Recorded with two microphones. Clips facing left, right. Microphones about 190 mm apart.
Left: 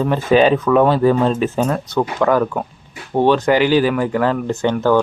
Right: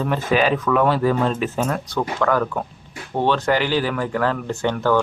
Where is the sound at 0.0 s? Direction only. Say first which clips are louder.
Left 6 dB; 30° left (ahead or behind).